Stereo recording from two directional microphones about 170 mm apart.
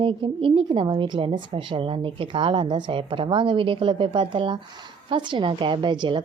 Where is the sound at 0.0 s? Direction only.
30° right (ahead or behind).